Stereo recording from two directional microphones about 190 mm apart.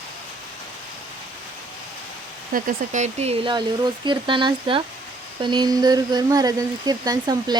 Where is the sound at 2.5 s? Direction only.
45° right (ahead or behind).